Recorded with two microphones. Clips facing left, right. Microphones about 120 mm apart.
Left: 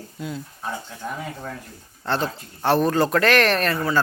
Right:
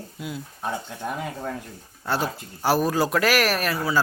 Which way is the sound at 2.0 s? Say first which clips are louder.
Left 1 dB; 5° right (ahead or behind).